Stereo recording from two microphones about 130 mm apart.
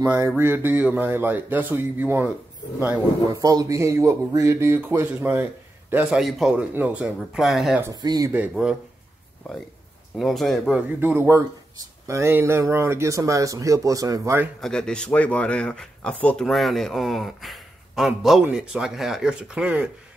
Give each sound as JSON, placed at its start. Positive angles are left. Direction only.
{"t": 0.0, "sound": "speech", "side_deg": -25}
{"t": 3.3, "sound": "speech", "side_deg": -30}
{"t": 6.0, "sound": "a man's voice", "side_deg": -5}
{"t": 7.9, "sound": "speech", "side_deg": -30}
{"t": 8.3, "sound": "speech", "side_deg": -10}
{"t": 10.1, "sound": "a man's voice", "side_deg": 0}
{"t": 11.0, "sound": "speech", "side_deg": -20}
{"t": 14.6, "sound": "a man's voice", "side_deg": 5}